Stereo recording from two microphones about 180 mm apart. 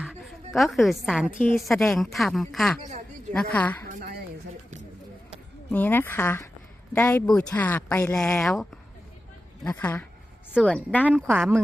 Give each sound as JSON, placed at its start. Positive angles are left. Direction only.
{"t": 0.5, "sound": "a woman's voice", "side_deg": 0}
{"t": 3.8, "sound": "a sound", "side_deg": -55}
{"t": 5.7, "sound": "a woman's voice", "side_deg": 10}
{"t": 9.6, "sound": "a woman's voice", "side_deg": 10}
{"t": 11.3, "sound": "a woman's voice", "side_deg": -5}